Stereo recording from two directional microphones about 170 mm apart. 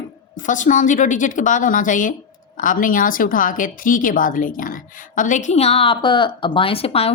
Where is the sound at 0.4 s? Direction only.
50° left (ahead or behind).